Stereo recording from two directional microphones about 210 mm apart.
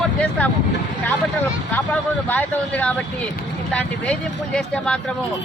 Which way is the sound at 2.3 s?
5° left (ahead or behind).